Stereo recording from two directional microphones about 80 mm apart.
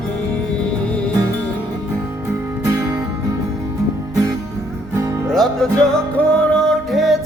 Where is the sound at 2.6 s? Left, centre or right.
Right.